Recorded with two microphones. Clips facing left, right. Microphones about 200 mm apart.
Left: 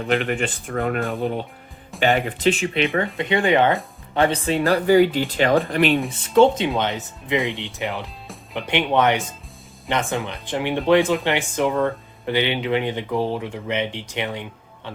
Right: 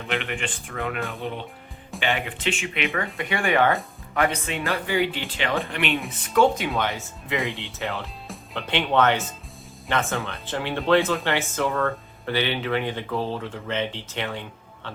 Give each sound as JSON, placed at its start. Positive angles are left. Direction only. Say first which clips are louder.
{"t": 0.1, "sound": "speech", "louder": "left 7 dB", "side_deg": 40}
{"t": 3.2, "sound": "speech", "louder": "left 4 dB", "side_deg": 20}
{"t": 4.1, "sound": "speech", "louder": "left 5 dB", "side_deg": 30}
{"t": 6.1, "sound": "speech", "louder": "left 2 dB", "side_deg": 25}